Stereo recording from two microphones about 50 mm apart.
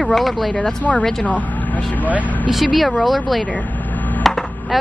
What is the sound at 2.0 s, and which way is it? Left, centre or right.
Speech, right.